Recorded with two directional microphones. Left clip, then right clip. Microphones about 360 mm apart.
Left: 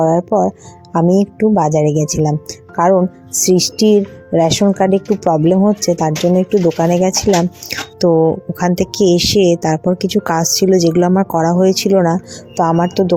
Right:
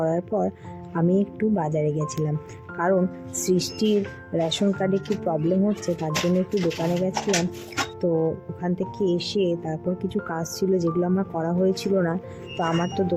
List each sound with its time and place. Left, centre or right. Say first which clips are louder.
0.0 s speech: left 11 dB; centre